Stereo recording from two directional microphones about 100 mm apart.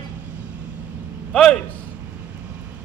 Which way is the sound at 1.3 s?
10° left (ahead or behind).